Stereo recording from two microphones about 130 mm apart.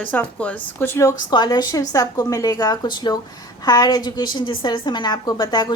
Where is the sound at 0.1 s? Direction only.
10° left (ahead or behind).